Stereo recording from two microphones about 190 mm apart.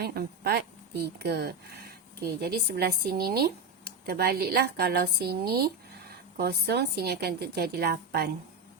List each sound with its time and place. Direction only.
0.0 s a woman's voice: 55° right (ahead or behind)